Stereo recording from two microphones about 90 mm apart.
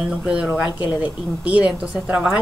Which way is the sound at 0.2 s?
10° right (ahead or behind).